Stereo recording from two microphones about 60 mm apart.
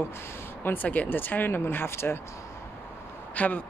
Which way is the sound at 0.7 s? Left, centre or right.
Left.